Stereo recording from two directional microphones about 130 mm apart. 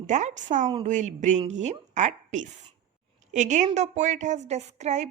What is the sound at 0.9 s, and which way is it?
A woman's voice, 65° right (ahead or behind).